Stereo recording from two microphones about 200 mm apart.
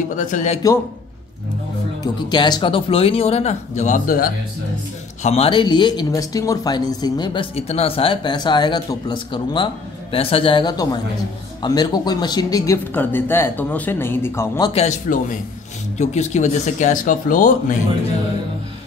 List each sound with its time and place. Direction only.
0.1 s speech: 40° left (ahead or behind)
2.3 s speech: 20° left (ahead or behind); by 4.3 s 40° left (ahead or behind)
5.2 s speech: 30° left (ahead or behind); by 14.7 s 15° left (ahead or behind)
14.7 s speech: 35° left (ahead or behind)